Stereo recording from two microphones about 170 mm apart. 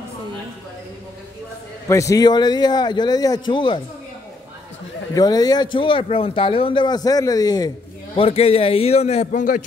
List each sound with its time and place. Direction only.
1.9 s speech: 20° left (ahead or behind)
5.1 s speech: 20° left (ahead or behind)
8.2 s a man's voice: 35° left (ahead or behind)